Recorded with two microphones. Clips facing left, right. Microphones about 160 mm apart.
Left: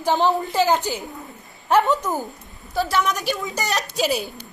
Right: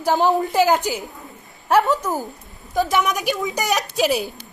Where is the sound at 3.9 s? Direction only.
Centre (ahead or behind).